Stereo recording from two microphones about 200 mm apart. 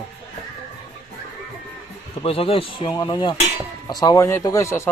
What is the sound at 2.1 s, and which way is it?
Speech, 30° left (ahead or behind).